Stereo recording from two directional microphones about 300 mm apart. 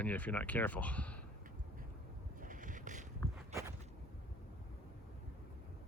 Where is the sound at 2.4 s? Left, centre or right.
Right.